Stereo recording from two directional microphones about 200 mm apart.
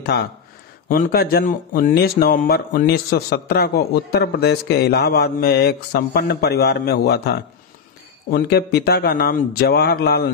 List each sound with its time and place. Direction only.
0.0 s a man's voice: 50° left (ahead or behind)